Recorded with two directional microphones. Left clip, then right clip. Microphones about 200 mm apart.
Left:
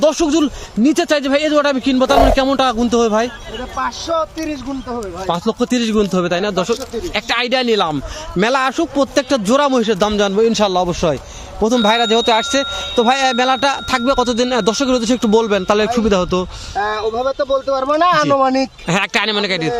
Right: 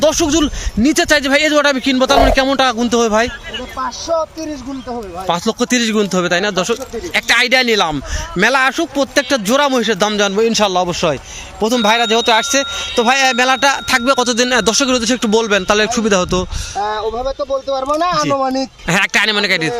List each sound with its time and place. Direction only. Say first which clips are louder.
0.0 s speech: right 1 dB; 5° right (ahead or behind)
3.8 s speech: even; 10° left (ahead or behind)
5.3 s speech: right 2 dB; 5° right (ahead or behind)